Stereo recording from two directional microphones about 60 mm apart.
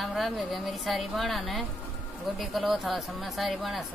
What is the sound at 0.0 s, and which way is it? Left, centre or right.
A woman's voice, centre.